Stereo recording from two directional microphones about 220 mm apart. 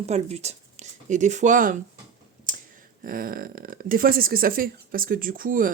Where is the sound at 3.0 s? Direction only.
40° right (ahead or behind).